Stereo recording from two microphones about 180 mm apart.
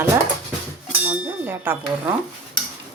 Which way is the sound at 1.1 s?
10° right (ahead or behind).